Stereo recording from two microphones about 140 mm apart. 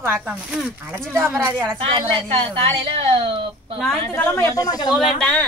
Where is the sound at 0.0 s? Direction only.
15° right (ahead or behind).